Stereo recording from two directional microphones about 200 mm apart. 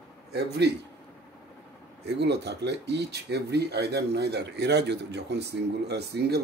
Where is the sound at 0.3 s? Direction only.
55° right (ahead or behind).